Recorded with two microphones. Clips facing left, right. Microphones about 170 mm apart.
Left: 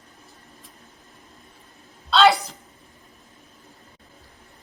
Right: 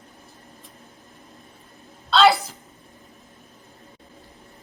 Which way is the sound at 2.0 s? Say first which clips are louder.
Even; centre (ahead or behind).